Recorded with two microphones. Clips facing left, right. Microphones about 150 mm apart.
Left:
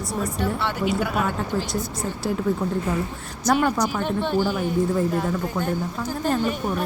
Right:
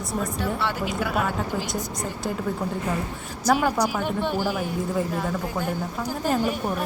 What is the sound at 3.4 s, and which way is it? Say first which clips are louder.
Speech: left 1 dB; 5° right (ahead or behind).